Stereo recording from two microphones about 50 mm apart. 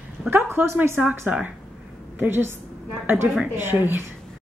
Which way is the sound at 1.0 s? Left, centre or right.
Right.